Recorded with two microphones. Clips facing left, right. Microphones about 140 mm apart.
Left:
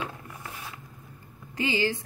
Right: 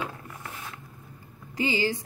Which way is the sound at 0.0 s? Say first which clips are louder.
Right 1 dB; 15° left (ahead or behind).